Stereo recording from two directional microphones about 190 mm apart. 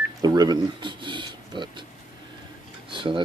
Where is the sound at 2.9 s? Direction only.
25° right (ahead or behind).